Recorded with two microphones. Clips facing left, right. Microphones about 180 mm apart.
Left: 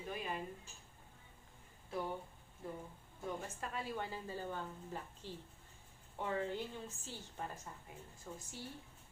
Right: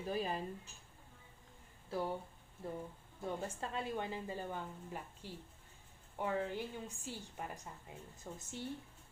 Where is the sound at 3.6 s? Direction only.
25° right (ahead or behind).